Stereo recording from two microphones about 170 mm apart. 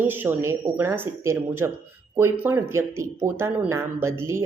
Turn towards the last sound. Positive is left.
turn(degrees=-15)  # may be behind; listen again after turning